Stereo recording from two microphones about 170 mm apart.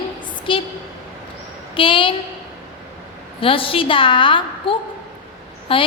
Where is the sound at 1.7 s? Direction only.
30° left (ahead or behind).